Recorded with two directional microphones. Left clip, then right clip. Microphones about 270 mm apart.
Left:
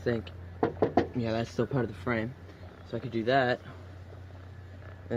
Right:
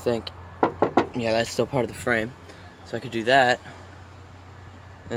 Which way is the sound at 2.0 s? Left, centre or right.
Centre.